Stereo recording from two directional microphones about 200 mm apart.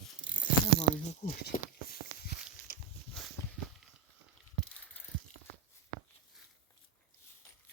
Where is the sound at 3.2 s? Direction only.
Centre (ahead or behind).